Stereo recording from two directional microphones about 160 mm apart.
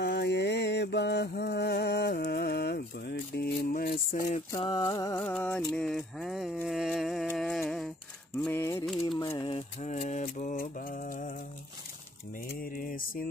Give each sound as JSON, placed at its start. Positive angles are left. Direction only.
{"t": 0.0, "sound": "mantra", "side_deg": 90}
{"t": 4.5, "sound": "mantra", "side_deg": 25}
{"t": 5.2, "sound": "music", "side_deg": 10}
{"t": 5.6, "sound": "speech", "side_deg": 0}
{"t": 7.2, "sound": "music", "side_deg": 0}
{"t": 8.4, "sound": "a sound", "side_deg": 10}
{"t": 9.4, "sound": "mantra", "side_deg": 35}
{"t": 12.4, "sound": "mantra", "side_deg": 65}